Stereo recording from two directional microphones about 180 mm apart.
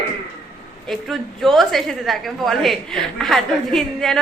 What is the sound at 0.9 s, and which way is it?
A woman's voice, centre (ahead or behind).